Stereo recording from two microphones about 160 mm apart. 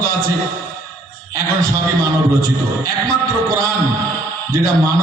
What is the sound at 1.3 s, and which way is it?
A man's voice, 20° right (ahead or behind).